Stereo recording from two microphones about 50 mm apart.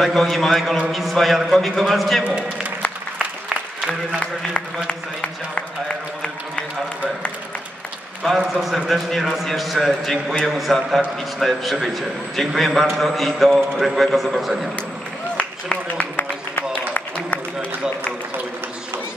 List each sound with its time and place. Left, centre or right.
0.0 s a man's voice: centre
2.2 s a man's voice: right
3.4 s applause: centre
4.8 s speech: left
8.2 s a man's voice: centre
8.5 s a man's voice: centre
15.3 s a sound: left
16.2 s a sound: left